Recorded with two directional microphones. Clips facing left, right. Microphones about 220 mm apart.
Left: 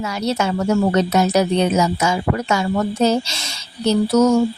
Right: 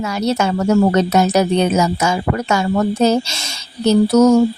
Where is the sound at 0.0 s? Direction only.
45° right (ahead or behind).